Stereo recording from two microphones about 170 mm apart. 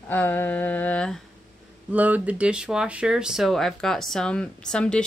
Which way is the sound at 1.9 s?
10° right (ahead or behind).